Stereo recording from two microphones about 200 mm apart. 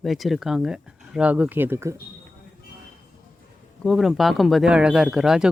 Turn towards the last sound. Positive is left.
turn(degrees=-5)  # may be behind; listen again after turning